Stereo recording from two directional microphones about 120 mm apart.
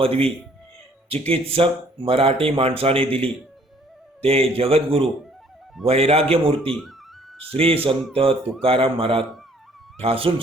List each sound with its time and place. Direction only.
0.0 s a man's voice: 50° right (ahead or behind)
6.7 s speech: 5° left (ahead or behind)
7.5 s speech: 50° right (ahead or behind)